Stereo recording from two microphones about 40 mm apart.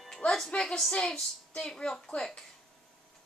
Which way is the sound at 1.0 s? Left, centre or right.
Centre.